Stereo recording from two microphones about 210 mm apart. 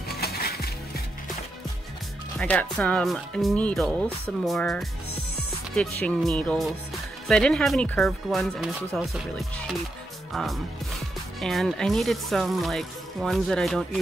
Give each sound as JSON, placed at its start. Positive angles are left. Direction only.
{"t": 0.1, "sound": "music", "side_deg": 50}
{"t": 2.3, "sound": "speech", "side_deg": 5}